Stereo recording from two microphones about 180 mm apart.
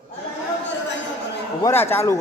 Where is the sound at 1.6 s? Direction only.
10° left (ahead or behind).